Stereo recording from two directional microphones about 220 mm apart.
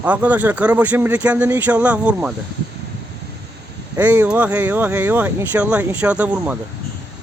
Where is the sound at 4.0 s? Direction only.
5° right (ahead or behind).